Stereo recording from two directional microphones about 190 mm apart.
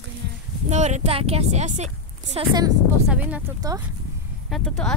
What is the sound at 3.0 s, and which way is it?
Speech, 5° right (ahead or behind).